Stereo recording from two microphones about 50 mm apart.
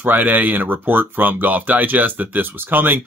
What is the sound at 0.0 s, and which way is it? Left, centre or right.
Speech, right.